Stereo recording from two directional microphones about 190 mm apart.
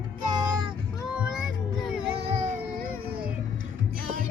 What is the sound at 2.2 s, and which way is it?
Baby cry, 35° right (ahead or behind).